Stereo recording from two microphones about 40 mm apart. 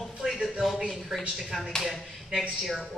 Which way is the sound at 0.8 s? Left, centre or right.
Centre.